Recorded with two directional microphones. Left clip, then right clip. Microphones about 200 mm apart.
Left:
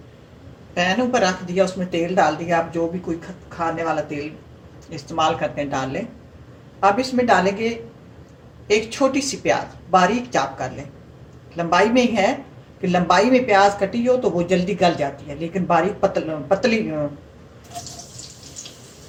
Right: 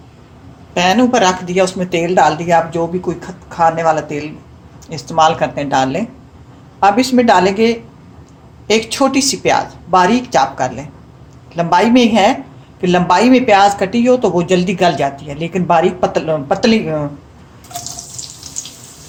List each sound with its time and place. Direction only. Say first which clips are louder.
0.7 s speech: right 7 dB; 45° right (ahead or behind)
4.9 s speech: right 8 dB; 50° right (ahead or behind)